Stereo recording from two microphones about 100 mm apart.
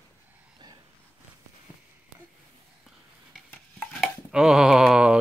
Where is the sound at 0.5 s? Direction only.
40° right (ahead or behind).